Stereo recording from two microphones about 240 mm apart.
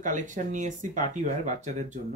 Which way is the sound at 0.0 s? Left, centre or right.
Right.